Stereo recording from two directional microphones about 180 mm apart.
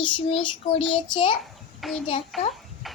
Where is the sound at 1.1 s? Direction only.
25° left (ahead or behind).